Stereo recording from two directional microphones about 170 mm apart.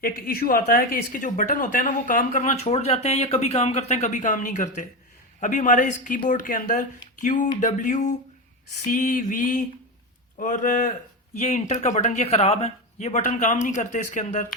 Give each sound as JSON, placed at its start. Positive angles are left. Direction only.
{"t": 0.0, "sound": "speech", "side_deg": 60}